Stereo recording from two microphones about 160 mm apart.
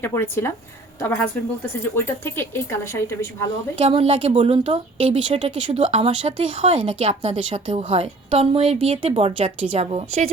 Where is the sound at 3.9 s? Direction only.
35° right (ahead or behind).